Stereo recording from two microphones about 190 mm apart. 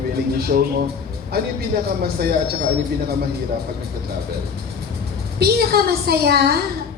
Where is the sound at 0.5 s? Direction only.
50° right (ahead or behind).